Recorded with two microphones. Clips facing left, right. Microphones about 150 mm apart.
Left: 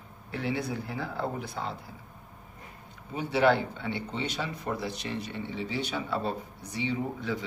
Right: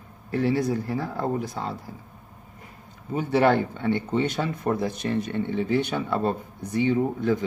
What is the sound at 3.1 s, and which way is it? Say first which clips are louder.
A man's voice: right 4 dB; 45° right (ahead or behind).